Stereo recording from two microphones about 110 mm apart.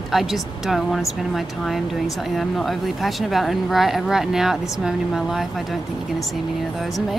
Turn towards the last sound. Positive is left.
turn(degrees=0)  # may be behind; listen again after turning